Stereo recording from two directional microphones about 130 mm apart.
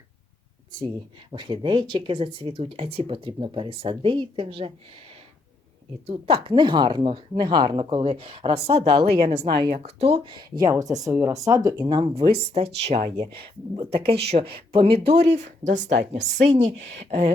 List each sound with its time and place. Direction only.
1.3 s speech: 40° right (ahead or behind)
6.1 s speech: 45° right (ahead or behind)
7.9 s speech: 50° right (ahead or behind)
10.8 s speech: 25° right (ahead or behind)
11.9 s speech: 40° right (ahead or behind); by 17.3 s 60° right (ahead or behind)